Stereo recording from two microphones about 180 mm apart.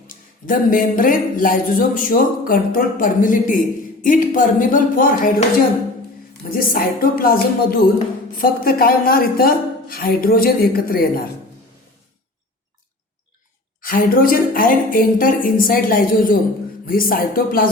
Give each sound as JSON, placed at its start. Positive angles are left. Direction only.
{"t": 0.4, "sound": "a woman's voice", "side_deg": 50}
{"t": 13.8, "sound": "speech", "side_deg": 50}